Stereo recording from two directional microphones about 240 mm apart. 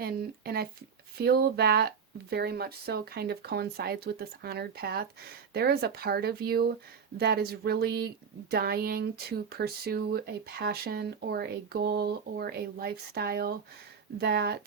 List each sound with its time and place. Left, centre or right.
0.0 s speech: right